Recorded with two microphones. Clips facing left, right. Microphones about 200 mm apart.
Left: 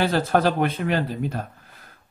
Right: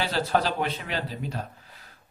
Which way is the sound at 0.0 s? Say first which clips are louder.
Left 5 dB; 50° left (ahead or behind).